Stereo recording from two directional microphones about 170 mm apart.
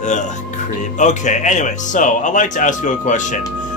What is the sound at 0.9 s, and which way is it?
Speech, 45° left (ahead or behind).